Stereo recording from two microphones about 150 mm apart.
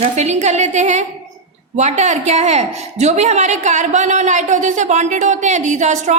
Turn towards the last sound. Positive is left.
turn(degrees=-50)  # may be behind; listen again after turning